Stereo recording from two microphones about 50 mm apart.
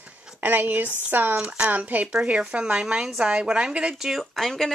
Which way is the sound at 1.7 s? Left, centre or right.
Right.